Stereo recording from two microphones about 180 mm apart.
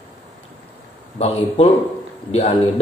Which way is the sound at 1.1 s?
35° left (ahead or behind).